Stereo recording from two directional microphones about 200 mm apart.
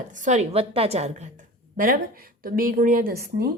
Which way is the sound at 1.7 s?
45° right (ahead or behind).